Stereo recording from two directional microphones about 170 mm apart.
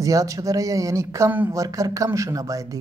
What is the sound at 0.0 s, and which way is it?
A man's voice, 20° right (ahead or behind).